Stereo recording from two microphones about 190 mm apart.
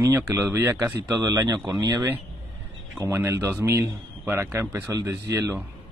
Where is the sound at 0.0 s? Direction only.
15° right (ahead or behind).